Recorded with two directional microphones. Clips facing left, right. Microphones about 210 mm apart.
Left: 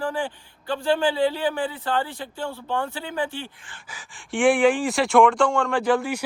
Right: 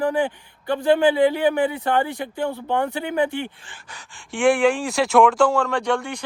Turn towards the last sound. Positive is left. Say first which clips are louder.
# left 2 dB
turn(degrees=5)  # may be behind; listen again after turning